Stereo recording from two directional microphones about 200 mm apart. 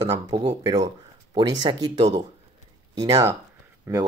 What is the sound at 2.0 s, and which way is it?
Speech, 35° right (ahead or behind).